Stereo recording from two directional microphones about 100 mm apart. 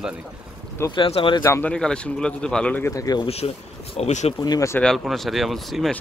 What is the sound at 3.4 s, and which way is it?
Speech, 65° left (ahead or behind).